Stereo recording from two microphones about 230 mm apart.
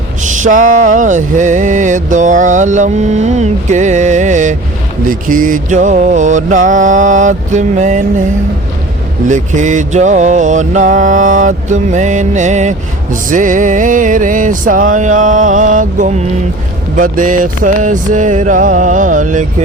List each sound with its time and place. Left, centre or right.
0.2 s mantra: right
9.2 s mantra: right